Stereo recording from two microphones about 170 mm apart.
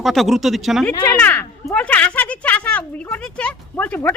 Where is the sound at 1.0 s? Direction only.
10° left (ahead or behind).